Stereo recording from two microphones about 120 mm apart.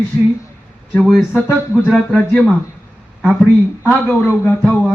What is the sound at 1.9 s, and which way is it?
Speech, 5° left (ahead or behind).